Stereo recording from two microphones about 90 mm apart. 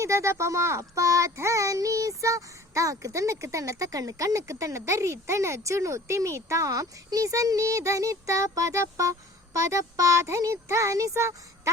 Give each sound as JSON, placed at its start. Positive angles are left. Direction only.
{"t": 0.0, "sound": "a child's voice", "side_deg": -30}